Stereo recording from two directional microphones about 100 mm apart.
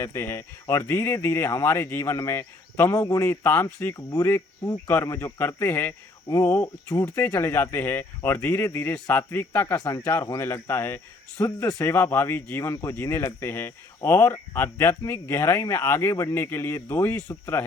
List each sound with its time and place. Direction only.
0.0 s speech: 25° left (ahead or behind)
3.9 s speech: 35° left (ahead or behind)
9.7 s speech: 35° left (ahead or behind)
10.0 s speech: 20° left (ahead or behind)